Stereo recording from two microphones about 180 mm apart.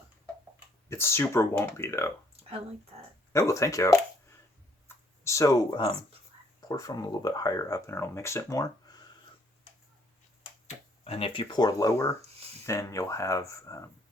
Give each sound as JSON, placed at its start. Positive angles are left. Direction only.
{"t": 0.9, "sound": "speech", "side_deg": 15}
{"t": 3.3, "sound": "speech", "side_deg": 15}
{"t": 5.2, "sound": "speech", "side_deg": 15}
{"t": 11.0, "sound": "speech", "side_deg": 35}